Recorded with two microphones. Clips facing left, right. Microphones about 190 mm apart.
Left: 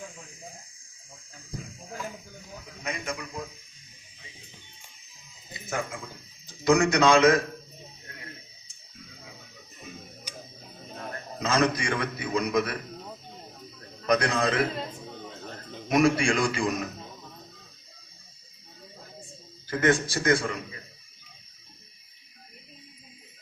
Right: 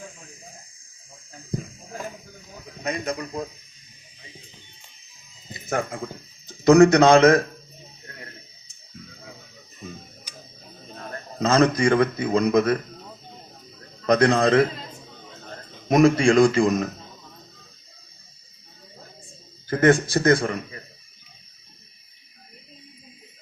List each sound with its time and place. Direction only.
2.8 s a man's voice: 40° right (ahead or behind)
5.6 s a man's voice: 40° right (ahead or behind)
8.0 s a sound: 40° right (ahead or behind)
11.3 s a man's voice: 40° right (ahead or behind)
14.1 s a man's voice: 45° right (ahead or behind)
15.9 s a man's voice: 45° right (ahead or behind)
19.7 s a man's voice: 40° right (ahead or behind)